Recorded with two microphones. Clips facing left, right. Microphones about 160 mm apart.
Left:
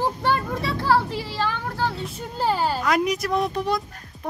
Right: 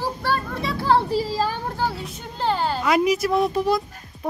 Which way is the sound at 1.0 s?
40° right (ahead or behind).